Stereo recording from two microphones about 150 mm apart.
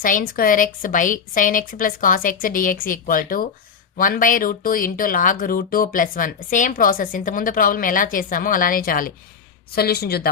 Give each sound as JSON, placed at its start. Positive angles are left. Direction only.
{"t": 0.0, "sound": "a woman's voice", "side_deg": 65}
{"t": 9.7, "sound": "speech", "side_deg": 90}